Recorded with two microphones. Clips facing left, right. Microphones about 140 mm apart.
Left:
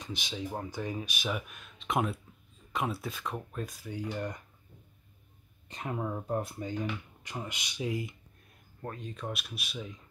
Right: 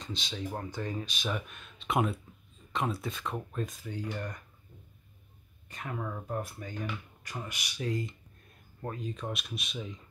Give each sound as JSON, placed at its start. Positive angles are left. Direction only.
{"t": 0.0, "sound": "speech", "side_deg": 15}
{"t": 5.7, "sound": "speech", "side_deg": 25}
{"t": 8.8, "sound": "speech", "side_deg": 0}